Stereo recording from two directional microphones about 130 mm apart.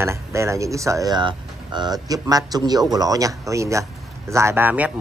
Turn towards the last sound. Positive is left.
turn(degrees=-15)  # may be behind; listen again after turning